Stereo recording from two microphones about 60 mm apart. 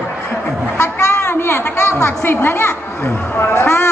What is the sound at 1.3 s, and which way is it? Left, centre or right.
A woman's voice, left.